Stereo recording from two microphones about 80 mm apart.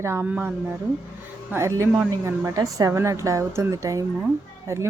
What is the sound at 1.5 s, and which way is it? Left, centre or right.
Speech, right.